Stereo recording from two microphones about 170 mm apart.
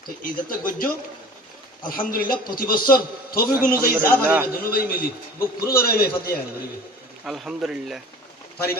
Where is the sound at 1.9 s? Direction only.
60° left (ahead or behind).